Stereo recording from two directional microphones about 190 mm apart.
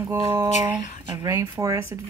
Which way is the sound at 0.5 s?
40° left (ahead or behind).